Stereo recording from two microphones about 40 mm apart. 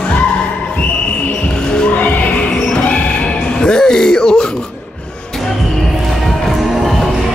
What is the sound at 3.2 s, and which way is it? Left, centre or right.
Music, left.